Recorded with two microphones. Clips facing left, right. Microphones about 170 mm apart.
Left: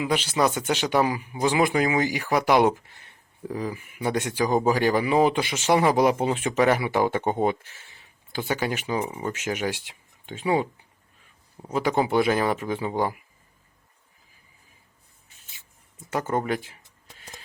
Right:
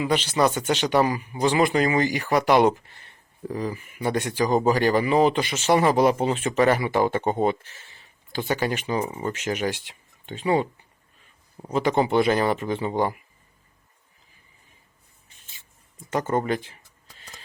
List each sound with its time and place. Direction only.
0.0 s speech: 10° left (ahead or behind)
11.7 s speech: 10° left (ahead or behind)
16.0 s speech: 5° left (ahead or behind)